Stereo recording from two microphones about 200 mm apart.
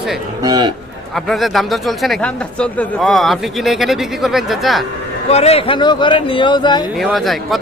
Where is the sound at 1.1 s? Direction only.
Centre (ahead or behind).